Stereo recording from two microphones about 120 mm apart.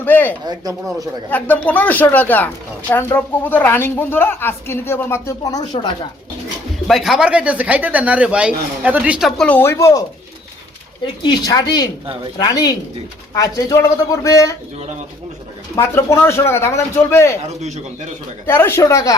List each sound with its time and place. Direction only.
0.0 s a woman's voice: 15° left (ahead or behind); by 5.9 s 35° left (ahead or behind)
6.8 s speech: centre (ahead or behind)
9.4 s a woman's voice: 15° left (ahead or behind)
11.0 s a woman's voice: 40° left (ahead or behind)
15.7 s a woman's voice: 25° left (ahead or behind)
17.6 s a man's voice: 75° right (ahead or behind)
18.4 s a woman's voice: 20° left (ahead or behind)